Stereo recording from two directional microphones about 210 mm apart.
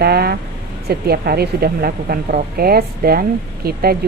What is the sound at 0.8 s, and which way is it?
A woman's voice, 50° right (ahead or behind).